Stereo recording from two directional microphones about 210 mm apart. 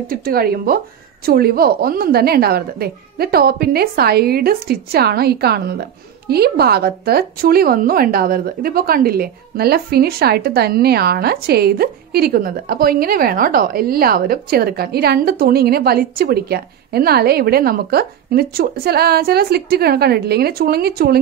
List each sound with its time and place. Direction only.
0.1 s a woman's voice: 45° right (ahead or behind)